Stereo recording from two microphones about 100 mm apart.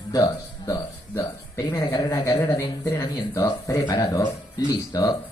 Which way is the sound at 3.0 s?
40° left (ahead or behind).